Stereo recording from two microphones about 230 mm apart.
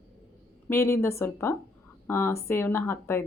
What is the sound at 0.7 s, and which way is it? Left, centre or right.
A woman's voice, centre.